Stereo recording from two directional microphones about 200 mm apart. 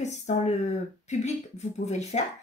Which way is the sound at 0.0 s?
35° left (ahead or behind).